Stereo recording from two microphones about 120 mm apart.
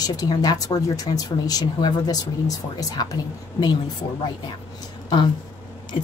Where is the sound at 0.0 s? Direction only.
30° left (ahead or behind).